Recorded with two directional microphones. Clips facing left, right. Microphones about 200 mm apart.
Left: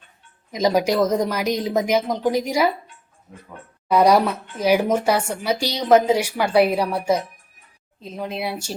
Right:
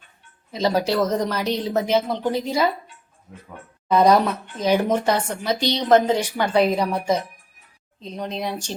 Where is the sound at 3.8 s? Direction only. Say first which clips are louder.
Even; 10° left (ahead or behind).